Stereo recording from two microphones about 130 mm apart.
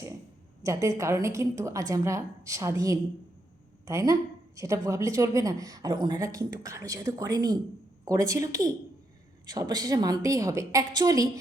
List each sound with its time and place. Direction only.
0.6 s a woman's voice: 25° right (ahead or behind)